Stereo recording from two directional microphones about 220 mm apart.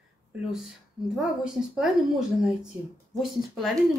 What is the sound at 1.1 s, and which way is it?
Speech, centre (ahead or behind).